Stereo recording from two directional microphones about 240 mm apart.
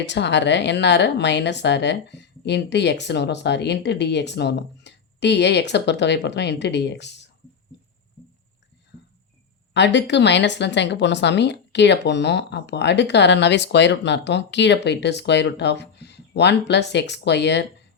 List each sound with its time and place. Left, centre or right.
0.0 s speech: left
9.7 s speech: left